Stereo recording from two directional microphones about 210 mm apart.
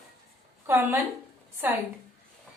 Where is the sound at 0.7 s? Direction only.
10° right (ahead or behind).